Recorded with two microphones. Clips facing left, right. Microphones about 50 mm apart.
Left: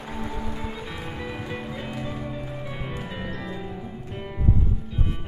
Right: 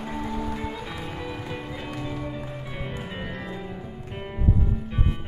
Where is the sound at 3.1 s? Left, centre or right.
Right.